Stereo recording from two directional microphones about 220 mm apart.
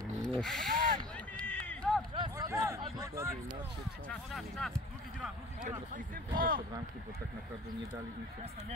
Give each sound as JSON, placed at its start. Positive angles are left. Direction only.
{"t": 0.2, "sound": "speech", "side_deg": 5}
{"t": 1.1, "sound": "run", "side_deg": 5}
{"t": 2.1, "sound": "a sound", "side_deg": -15}
{"t": 4.3, "sound": "speech", "side_deg": 0}
{"t": 6.3, "sound": "speech", "side_deg": -40}